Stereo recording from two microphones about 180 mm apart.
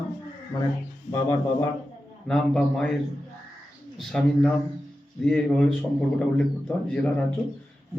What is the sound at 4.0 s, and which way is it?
A man's voice, centre (ahead or behind).